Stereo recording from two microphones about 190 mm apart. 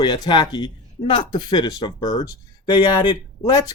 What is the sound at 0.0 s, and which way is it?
Speech, 25° left (ahead or behind).